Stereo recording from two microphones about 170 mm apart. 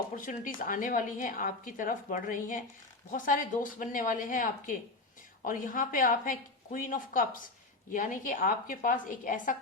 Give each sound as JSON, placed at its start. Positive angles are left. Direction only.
{"t": 0.2, "sound": "a woman's voice", "side_deg": 50}